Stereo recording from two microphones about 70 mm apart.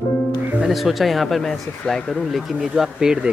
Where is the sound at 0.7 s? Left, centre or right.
Centre.